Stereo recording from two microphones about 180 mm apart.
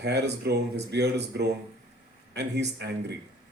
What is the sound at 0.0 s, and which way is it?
Speech, 70° right (ahead or behind).